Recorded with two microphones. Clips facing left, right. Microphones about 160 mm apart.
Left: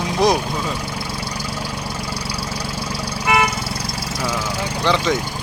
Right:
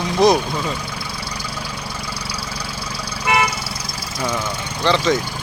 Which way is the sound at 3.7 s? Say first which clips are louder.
Left 4 dB; 60° left (ahead or behind).